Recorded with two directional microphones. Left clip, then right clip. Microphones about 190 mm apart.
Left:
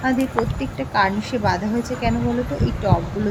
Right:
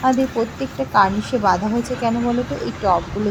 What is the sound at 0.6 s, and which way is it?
Speech, 15° right (ahead or behind).